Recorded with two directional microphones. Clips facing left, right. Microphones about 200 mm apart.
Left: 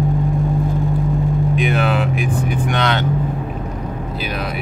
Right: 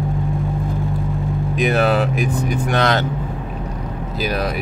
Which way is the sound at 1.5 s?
40° right (ahead or behind).